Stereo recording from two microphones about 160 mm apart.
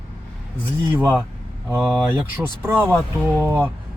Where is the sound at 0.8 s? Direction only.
15° right (ahead or behind).